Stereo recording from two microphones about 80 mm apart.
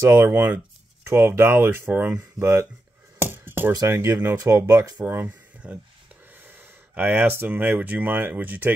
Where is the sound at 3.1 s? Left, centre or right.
Right.